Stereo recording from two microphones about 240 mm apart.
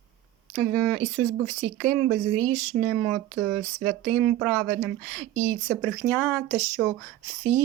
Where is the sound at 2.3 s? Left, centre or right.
Right.